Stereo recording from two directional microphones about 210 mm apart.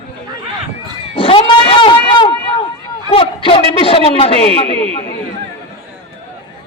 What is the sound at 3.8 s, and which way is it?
A man's voice, 25° left (ahead or behind).